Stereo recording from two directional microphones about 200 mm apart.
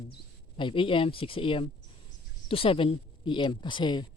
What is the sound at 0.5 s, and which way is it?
Speech, 25° left (ahead or behind).